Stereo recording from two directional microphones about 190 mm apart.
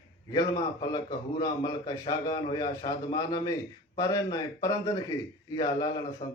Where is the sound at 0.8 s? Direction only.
20° left (ahead or behind).